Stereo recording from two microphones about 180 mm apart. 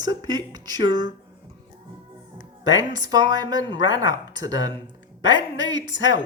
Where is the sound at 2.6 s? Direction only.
20° right (ahead or behind).